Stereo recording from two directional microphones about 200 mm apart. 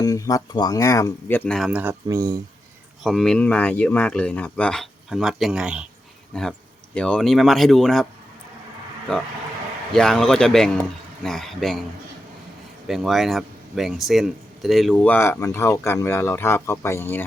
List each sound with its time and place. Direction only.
0.0 s speech: 15° left (ahead or behind)
1.5 s speech: centre (ahead or behind); by 2.4 s 15° right (ahead or behind)
3.0 s speech: centre (ahead or behind)
9.9 s speech: centre (ahead or behind)
12.9 s speech: centre (ahead or behind)